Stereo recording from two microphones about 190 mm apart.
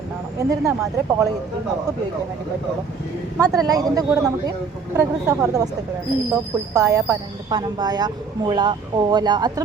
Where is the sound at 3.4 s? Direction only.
20° right (ahead or behind).